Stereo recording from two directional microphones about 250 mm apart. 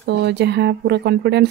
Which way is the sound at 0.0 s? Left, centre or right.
Right.